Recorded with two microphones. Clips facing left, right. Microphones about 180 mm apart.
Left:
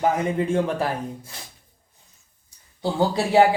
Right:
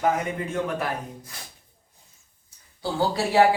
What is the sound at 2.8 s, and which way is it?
Speech, 20° left (ahead or behind).